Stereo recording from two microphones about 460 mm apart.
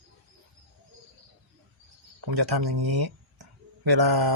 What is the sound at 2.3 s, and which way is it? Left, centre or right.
Speech, right.